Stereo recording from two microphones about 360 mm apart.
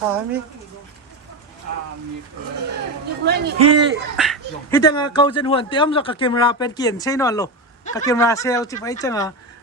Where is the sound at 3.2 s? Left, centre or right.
Right.